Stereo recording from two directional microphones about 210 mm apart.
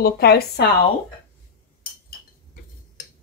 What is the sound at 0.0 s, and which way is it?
Speech, 50° left (ahead or behind).